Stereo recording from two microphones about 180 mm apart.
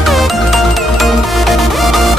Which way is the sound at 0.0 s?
Centre (ahead or behind).